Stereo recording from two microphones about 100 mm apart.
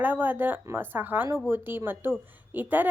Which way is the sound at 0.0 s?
20° right (ahead or behind).